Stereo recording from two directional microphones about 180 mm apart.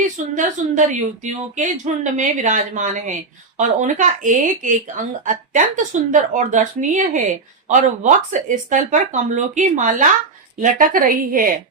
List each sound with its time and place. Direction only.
0.3 s speech: 45° right (ahead or behind)